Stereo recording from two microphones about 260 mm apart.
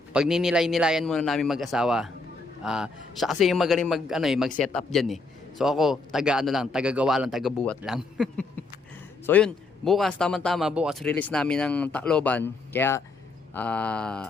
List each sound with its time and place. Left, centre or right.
0.1 s speech: centre